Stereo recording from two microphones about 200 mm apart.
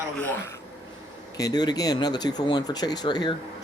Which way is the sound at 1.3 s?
20° left (ahead or behind).